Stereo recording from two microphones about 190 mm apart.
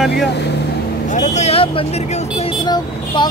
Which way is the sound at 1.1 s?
35° left (ahead or behind).